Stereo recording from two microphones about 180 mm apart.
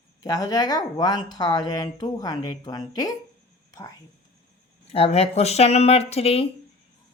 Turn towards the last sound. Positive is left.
turn(degrees=35)  # may be behind; listen again after turning